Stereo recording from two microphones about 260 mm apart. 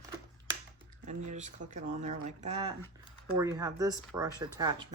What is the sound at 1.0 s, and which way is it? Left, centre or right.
Speech, right.